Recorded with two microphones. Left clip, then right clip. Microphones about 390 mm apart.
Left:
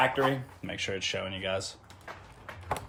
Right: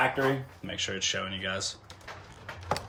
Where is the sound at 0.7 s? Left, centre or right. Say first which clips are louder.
Right 1 dB; centre.